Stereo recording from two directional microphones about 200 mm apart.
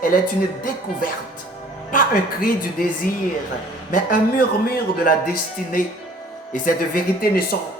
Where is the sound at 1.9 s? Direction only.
45° left (ahead or behind).